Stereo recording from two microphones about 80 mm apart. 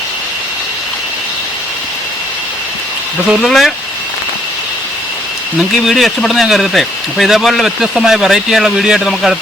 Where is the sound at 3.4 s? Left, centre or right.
Centre.